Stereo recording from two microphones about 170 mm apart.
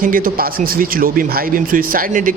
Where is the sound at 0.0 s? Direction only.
55° right (ahead or behind).